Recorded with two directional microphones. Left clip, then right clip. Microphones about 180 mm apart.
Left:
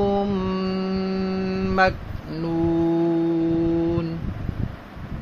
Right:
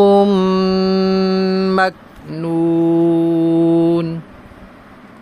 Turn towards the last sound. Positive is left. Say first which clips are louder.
# right 9 dB
turn(degrees=-40)  # may be behind; listen again after turning